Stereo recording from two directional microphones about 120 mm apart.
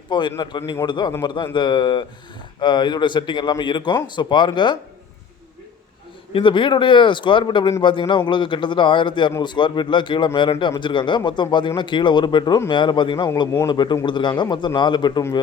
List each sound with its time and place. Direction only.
0.1 s speech: 40° left (ahead or behind)
6.3 s speech: 45° left (ahead or behind)